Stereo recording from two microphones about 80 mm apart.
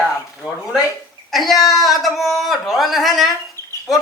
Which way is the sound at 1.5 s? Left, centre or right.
Left.